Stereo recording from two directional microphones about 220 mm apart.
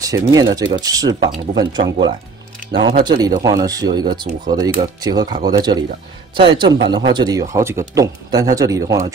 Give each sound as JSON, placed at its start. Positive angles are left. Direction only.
{"t": 0.0, "sound": "speech", "side_deg": -15}